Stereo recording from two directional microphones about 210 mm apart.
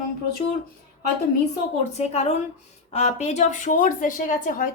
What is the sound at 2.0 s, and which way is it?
A woman's voice, 30° left (ahead or behind).